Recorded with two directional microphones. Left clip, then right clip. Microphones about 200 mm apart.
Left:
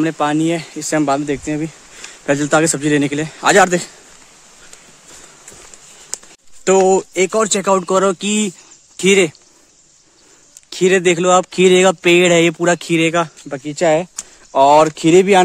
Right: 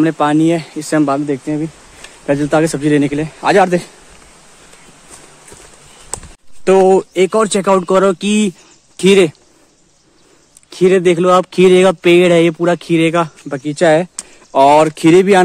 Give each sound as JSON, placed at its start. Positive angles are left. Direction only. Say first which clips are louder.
{"t": 0.0, "sound": "a man's voice", "louder": "right 4 dB", "side_deg": 5}
{"t": 6.6, "sound": "speech", "louder": "right 3 dB", "side_deg": 10}
{"t": 10.7, "sound": "speech", "louder": "right 2 dB", "side_deg": 10}